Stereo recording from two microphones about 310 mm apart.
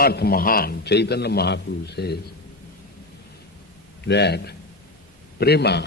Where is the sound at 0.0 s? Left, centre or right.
Left.